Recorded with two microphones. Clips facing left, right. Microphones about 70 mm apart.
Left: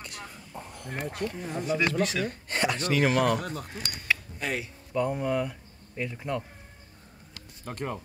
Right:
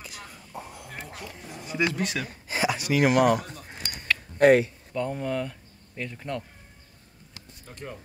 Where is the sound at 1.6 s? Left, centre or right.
Centre.